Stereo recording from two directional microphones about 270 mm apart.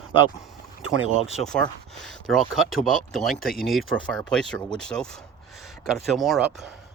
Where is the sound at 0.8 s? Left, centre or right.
Right.